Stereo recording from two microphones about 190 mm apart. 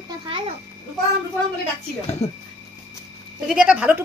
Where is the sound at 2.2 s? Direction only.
35° left (ahead or behind).